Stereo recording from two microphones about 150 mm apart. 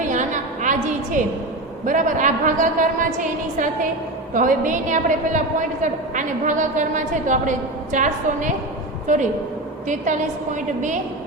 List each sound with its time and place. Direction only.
0.0 s a sound: 55° right (ahead or behind)
1.8 s a woman's voice: 60° right (ahead or behind)
10.8 s a woman's voice: 55° right (ahead or behind)